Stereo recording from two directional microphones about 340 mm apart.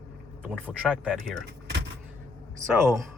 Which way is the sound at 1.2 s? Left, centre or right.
Right.